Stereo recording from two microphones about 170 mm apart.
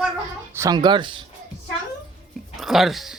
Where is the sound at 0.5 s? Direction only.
20° right (ahead or behind).